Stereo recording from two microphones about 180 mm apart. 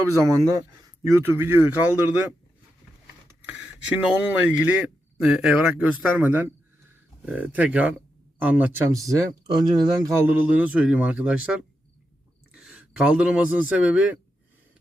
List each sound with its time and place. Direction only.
0.1 s speech: 20° right (ahead or behind)
3.4 s speech: 10° right (ahead or behind); by 10.1 s 25° right (ahead or behind)
10.2 s speech: 10° right (ahead or behind)
12.5 s a man's voice: 5° right (ahead or behind)